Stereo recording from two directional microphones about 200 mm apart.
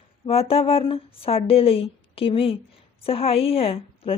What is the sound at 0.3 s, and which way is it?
Speech, 30° left (ahead or behind).